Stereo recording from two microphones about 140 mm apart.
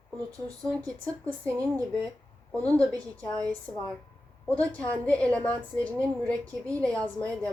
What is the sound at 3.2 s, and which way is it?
A woman's voice, 10° left (ahead or behind).